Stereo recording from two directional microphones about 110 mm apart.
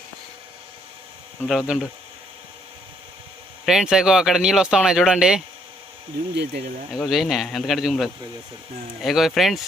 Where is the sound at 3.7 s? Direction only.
5° right (ahead or behind).